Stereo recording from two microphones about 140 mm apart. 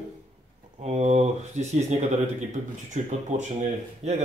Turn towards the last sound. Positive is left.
turn(degrees=-55)  # may be behind; listen again after turning